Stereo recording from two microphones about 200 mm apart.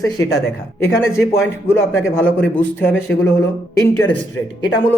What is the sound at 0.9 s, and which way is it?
Speech, 15° left (ahead or behind).